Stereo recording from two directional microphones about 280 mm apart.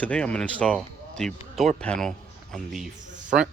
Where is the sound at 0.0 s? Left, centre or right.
Centre.